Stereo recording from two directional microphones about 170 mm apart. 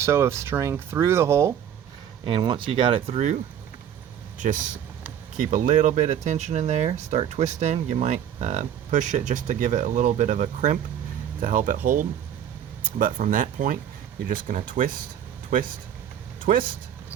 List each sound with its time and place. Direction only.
0.0 s speech: 15° right (ahead or behind)
2.2 s speech: 30° right (ahead or behind)
5.4 s speech: 50° right (ahead or behind)